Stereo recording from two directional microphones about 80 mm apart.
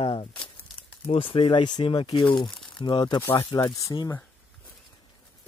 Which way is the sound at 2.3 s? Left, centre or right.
Left.